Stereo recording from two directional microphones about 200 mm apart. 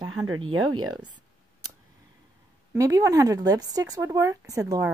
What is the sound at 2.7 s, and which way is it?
Speech, 15° right (ahead or behind).